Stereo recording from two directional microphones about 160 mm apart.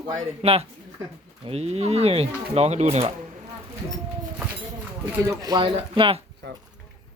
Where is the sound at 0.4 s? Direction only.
40° right (ahead or behind).